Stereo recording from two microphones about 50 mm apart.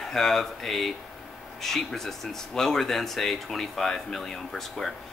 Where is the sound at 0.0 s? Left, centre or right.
Centre.